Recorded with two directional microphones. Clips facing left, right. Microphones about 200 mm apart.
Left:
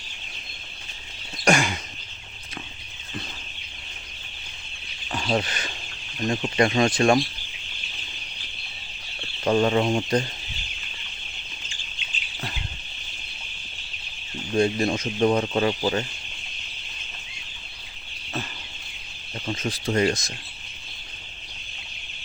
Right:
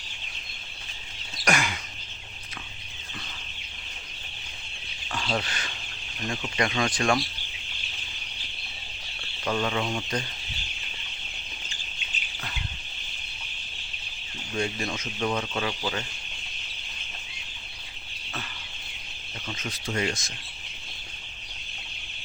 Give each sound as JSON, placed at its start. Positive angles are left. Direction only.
{"t": 1.5, "sound": "a sound", "side_deg": 25}
{"t": 5.1, "sound": "speech", "side_deg": 25}
{"t": 9.4, "sound": "speech", "side_deg": 35}
{"t": 14.5, "sound": "speech", "side_deg": 35}
{"t": 19.5, "sound": "speech", "side_deg": 30}